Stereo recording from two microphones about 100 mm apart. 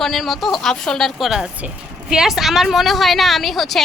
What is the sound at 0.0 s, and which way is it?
A woman's voice, centre (ahead or behind).